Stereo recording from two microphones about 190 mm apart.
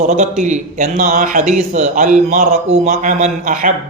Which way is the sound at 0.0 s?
40° right (ahead or behind).